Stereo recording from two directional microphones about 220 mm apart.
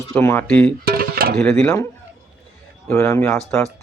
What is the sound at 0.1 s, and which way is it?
Speech, 10° left (ahead or behind).